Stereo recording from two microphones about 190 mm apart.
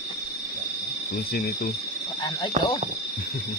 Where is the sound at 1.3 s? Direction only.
55° left (ahead or behind).